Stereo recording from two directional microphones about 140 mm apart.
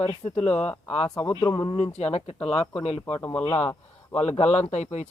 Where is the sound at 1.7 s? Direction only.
50° left (ahead or behind).